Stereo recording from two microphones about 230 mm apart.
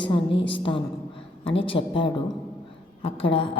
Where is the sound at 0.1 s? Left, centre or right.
Left.